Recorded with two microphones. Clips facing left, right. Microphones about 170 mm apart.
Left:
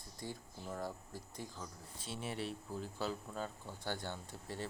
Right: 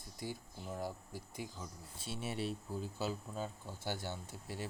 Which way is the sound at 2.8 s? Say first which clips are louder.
Left 1 dB; 15° right (ahead or behind).